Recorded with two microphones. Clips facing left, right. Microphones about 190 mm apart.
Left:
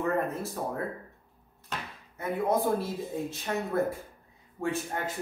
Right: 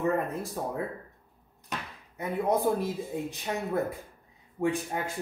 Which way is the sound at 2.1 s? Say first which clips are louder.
Even; 15° right (ahead or behind).